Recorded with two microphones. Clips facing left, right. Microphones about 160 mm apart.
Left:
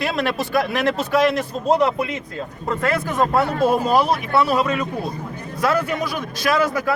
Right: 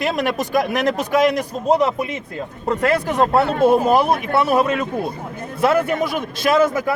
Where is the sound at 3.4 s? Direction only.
60° right (ahead or behind).